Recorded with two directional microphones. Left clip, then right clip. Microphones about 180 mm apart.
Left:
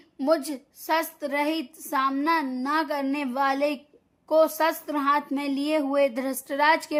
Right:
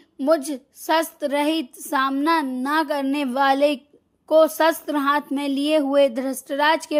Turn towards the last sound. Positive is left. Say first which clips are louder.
# right 2 dB
turn(degrees=-20)  # may be behind; listen again after turning